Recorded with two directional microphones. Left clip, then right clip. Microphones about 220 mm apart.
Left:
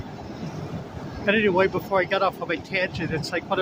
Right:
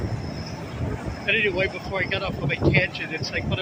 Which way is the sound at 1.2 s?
25° left (ahead or behind).